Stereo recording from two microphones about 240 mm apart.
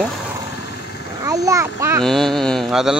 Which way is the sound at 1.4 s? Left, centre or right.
Centre.